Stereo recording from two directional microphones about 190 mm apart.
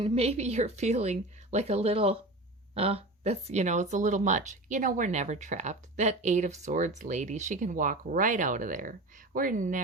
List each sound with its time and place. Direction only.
0.0 s speech: 30° right (ahead or behind)